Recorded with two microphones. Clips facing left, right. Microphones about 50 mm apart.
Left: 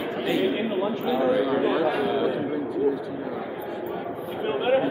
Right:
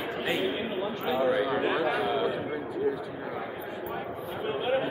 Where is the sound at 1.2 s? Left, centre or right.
Centre.